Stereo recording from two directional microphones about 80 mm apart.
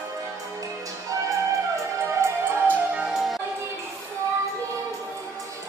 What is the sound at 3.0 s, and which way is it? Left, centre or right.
Music, centre.